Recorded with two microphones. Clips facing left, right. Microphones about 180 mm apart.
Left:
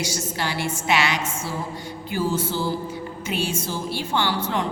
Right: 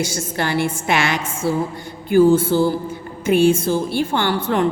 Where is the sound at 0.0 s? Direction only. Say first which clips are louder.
Right 5 dB; 50° right (ahead or behind).